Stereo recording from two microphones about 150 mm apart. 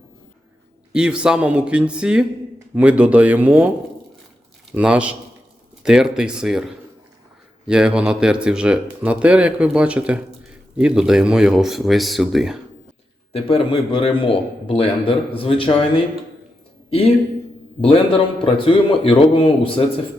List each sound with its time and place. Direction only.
0.9 s speech: 5° right (ahead or behind)
4.7 s speech: 5° right (ahead or behind)
13.3 s a man's voice: 35° left (ahead or behind)
17.7 s a man's voice: 40° left (ahead or behind)